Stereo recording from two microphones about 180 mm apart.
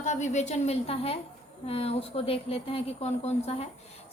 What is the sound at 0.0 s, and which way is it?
A woman's voice, 40° left (ahead or behind).